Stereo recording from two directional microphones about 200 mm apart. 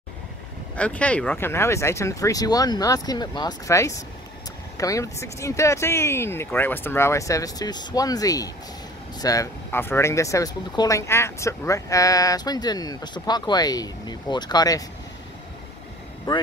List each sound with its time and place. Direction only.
0.7 s speech: 5° left (ahead or behind)